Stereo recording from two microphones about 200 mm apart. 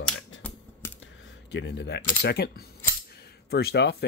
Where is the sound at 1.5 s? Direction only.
60° left (ahead or behind).